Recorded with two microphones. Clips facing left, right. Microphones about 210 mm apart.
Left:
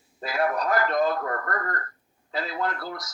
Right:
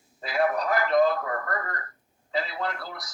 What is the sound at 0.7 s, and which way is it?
Speech, 40° left (ahead or behind).